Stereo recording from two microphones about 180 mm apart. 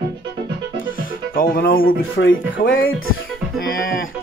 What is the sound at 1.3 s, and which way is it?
Speech, 55° left (ahead or behind).